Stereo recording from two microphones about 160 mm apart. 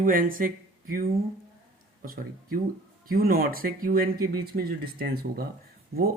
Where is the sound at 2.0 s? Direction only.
65° right (ahead or behind).